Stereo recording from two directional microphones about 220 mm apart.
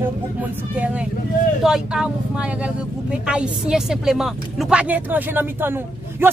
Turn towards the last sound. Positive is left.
turn(degrees=-10)  # may be behind; listen again after turning